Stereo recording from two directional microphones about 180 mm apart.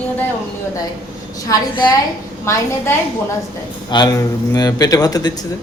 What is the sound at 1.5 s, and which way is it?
Speech, 25° left (ahead or behind).